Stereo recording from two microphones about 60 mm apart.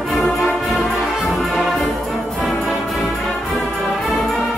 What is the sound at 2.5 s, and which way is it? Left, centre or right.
Music, centre.